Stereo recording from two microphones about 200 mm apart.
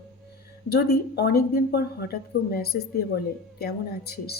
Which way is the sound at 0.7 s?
50° left (ahead or behind).